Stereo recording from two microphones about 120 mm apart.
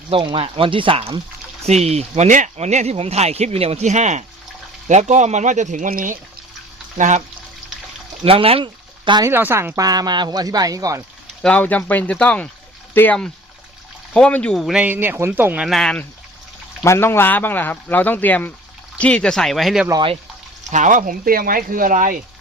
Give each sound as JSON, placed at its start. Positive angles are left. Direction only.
{"t": 0.1, "sound": "speech", "side_deg": -50}
{"t": 1.6, "sound": "speech", "side_deg": -65}
{"t": 8.2, "sound": "speech", "side_deg": -50}
{"t": 9.2, "sound": "speech", "side_deg": -20}
{"t": 11.4, "sound": "speech", "side_deg": 10}
{"t": 14.6, "sound": "speech", "side_deg": -5}
{"t": 14.8, "sound": "speech", "side_deg": -15}
{"t": 15.6, "sound": "speech", "side_deg": 0}
{"t": 16.8, "sound": "speech", "side_deg": 20}
{"t": 20.7, "sound": "speech", "side_deg": -90}